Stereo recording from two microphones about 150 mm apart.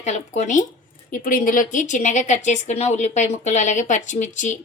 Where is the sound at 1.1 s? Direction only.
65° left (ahead or behind).